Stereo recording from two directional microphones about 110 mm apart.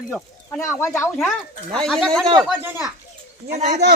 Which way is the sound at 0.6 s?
25° left (ahead or behind).